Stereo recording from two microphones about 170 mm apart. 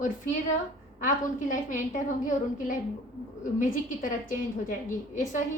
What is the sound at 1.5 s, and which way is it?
A woman's voice, 50° left (ahead or behind).